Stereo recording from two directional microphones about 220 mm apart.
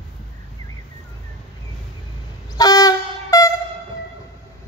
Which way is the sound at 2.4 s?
15° left (ahead or behind).